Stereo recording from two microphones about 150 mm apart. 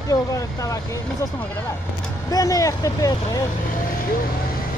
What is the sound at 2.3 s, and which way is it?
Speech, 25° left (ahead or behind).